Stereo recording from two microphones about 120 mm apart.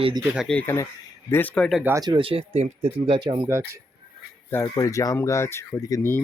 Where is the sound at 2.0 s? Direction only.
40° right (ahead or behind); by 3.2 s 60° right (ahead or behind).